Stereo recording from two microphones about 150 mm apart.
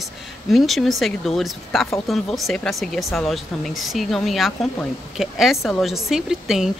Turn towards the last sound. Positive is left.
turn(degrees=-5)  # may be behind; listen again after turning